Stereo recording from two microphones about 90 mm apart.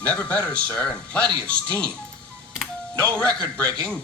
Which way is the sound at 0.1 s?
15° left (ahead or behind).